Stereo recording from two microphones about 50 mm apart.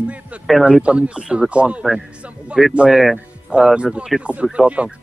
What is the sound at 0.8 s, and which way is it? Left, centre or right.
Speech, right.